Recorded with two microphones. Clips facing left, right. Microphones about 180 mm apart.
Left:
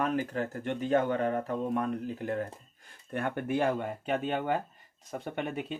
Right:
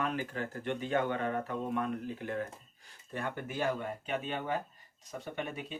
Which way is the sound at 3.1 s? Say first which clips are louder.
Left 7 dB; 60° left (ahead or behind).